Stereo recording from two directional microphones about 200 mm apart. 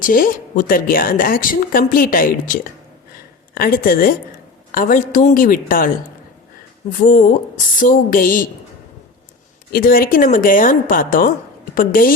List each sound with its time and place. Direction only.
0.0 s a woman's voice: 45° left (ahead or behind)
6.9 s a woman's voice: 40° left (ahead or behind)
9.7 s a woman's voice: 45° left (ahead or behind)